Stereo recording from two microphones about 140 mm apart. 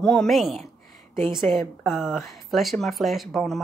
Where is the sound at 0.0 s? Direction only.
5° left (ahead or behind).